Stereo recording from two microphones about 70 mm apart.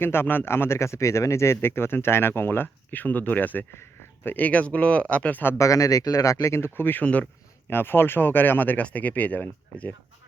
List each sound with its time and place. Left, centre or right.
0.0 s speech: left; by 5.4 s centre
5.5 s speech: left
7.0 s speech: centre
7.7 s speech: left